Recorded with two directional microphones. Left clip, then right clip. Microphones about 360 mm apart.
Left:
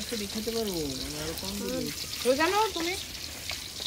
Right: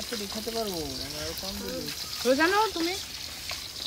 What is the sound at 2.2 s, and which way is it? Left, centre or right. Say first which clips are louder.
Speech: right 2 dB; right.